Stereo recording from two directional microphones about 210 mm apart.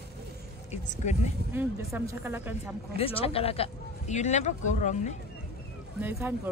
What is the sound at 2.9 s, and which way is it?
Speech, 25° left (ahead or behind).